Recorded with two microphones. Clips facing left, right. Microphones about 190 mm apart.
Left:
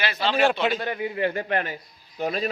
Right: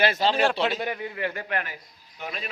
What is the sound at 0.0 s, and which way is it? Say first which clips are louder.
Speech: right 4 dB; 45° right (ahead or behind).